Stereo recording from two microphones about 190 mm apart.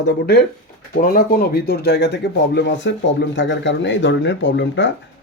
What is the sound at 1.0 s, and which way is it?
Speech, 50° left (ahead or behind).